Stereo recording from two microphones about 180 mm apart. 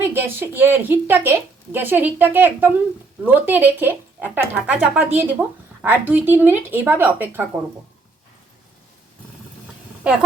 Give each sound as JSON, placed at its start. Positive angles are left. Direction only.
{"t": 0.0, "sound": "a woman's voice", "side_deg": -10}